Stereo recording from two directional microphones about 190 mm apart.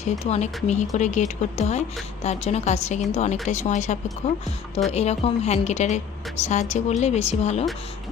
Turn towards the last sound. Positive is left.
turn(degrees=35)  # may be behind; listen again after turning